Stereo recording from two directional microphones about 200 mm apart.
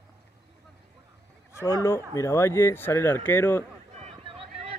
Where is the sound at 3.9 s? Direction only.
30° right (ahead or behind).